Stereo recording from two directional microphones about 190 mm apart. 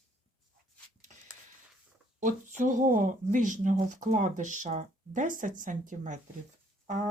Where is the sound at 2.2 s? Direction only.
40° right (ahead or behind).